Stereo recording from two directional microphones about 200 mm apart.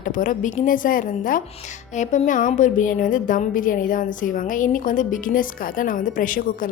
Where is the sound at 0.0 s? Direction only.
40° left (ahead or behind).